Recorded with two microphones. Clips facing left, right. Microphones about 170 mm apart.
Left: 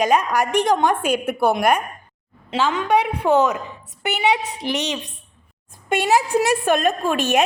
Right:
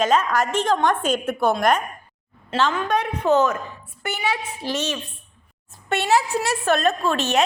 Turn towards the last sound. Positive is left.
turn(degrees=10)  # may be behind; listen again after turning